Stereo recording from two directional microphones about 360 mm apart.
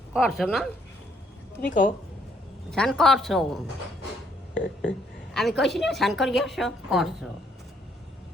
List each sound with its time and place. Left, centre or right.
0.1 s a woman's voice: centre
1.6 s speech: left
2.6 s a woman's voice: centre
4.5 s speech: left
5.3 s a woman's voice: centre